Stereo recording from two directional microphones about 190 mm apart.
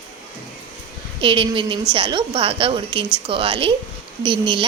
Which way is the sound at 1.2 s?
25° right (ahead or behind).